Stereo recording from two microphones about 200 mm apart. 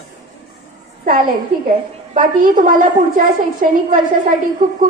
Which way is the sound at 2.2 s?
45° right (ahead or behind).